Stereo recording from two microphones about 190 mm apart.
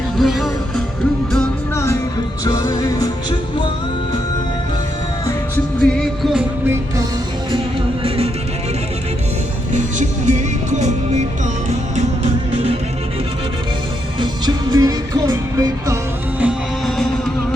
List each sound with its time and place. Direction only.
0.2 s music: centre (ahead or behind); by 3.1 s 20° left (ahead or behind)
5.8 s music: 5° left (ahead or behind)
8.0 s music: 30° right (ahead or behind)
9.7 s music: 40° right (ahead or behind)
14.2 s music: 20° right (ahead or behind)
16.4 s music: centre (ahead or behind)